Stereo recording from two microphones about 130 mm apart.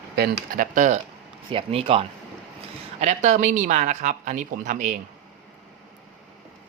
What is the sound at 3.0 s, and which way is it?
Speech, 70° right (ahead or behind).